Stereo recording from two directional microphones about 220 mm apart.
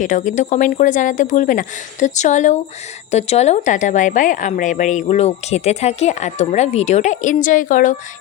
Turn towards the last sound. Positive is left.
turn(degrees=35)  # may be behind; listen again after turning